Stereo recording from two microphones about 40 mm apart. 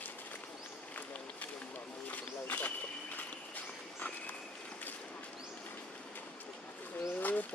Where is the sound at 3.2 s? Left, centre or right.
Left.